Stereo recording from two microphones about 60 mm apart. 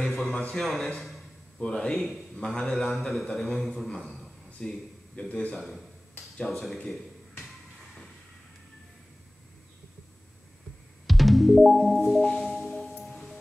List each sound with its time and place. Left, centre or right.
0.0 s speech: centre
1.6 s a man's voice: centre
2.3 s a man's voice: centre
2.8 s speech: centre
4.0 s a sound: centre
4.6 s a man's voice: centre
5.5 s speech: centre
11.1 s music: centre